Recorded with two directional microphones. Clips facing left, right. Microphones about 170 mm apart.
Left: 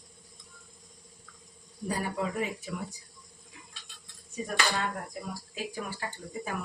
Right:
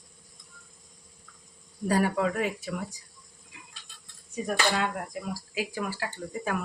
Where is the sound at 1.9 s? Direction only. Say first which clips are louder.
Right 7 dB; 80° right.